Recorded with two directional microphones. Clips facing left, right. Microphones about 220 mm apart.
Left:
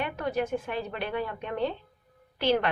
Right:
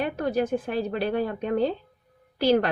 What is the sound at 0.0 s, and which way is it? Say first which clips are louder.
A woman's voice: right 4 dB; 35° right (ahead or behind).